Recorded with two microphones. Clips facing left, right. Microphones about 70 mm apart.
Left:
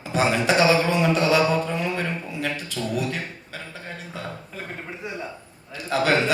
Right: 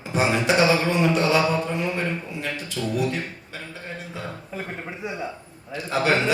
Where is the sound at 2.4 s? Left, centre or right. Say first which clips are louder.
Left 1 dB; right.